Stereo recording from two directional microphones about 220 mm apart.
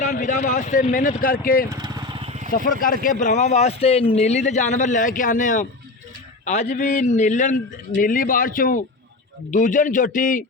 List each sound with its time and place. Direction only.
0.0 s speech: 35° left (ahead or behind)
1.7 s vehicle: 15° right (ahead or behind)
2.5 s speech: 40° left (ahead or behind)